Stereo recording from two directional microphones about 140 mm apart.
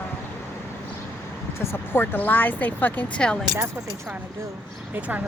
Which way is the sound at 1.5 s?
15° left (ahead or behind).